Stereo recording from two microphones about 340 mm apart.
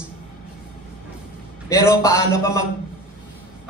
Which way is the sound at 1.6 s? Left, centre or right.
Centre.